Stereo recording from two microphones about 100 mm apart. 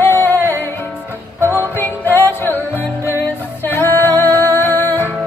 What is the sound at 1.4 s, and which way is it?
Music, 25° left (ahead or behind).